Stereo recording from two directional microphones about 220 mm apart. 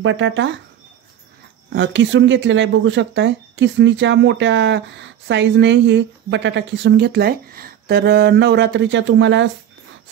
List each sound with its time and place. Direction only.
0.0 s speech: 60° right (ahead or behind)
1.7 s speech: 55° right (ahead or behind)